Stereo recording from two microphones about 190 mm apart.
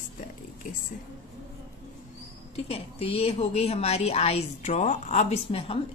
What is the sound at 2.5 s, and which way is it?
Speech, 30° left (ahead or behind).